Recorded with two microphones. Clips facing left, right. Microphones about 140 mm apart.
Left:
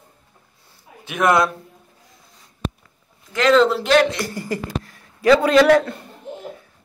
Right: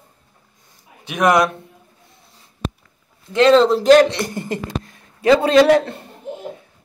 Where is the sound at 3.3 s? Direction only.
30° right (ahead or behind).